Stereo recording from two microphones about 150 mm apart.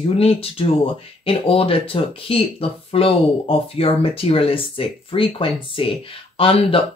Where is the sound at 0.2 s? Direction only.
40° left (ahead or behind).